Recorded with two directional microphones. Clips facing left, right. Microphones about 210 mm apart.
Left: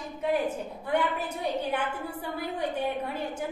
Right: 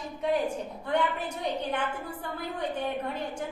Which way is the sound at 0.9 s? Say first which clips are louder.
Left 1 dB; 10° left (ahead or behind).